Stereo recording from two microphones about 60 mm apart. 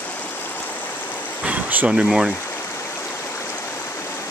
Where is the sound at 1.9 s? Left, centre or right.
Centre.